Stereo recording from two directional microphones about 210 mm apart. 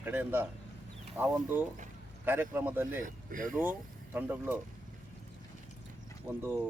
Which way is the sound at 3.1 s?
40° right (ahead or behind).